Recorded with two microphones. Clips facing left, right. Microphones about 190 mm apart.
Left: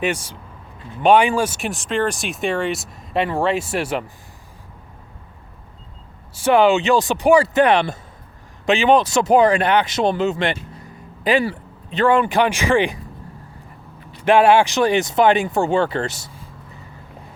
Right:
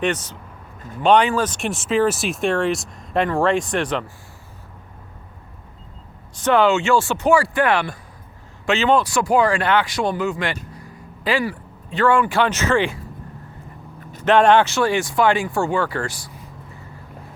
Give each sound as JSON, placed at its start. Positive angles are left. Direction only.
{"t": 0.0, "sound": "speech", "side_deg": 10}
{"t": 6.3, "sound": "speech", "side_deg": 10}
{"t": 14.3, "sound": "speech", "side_deg": 10}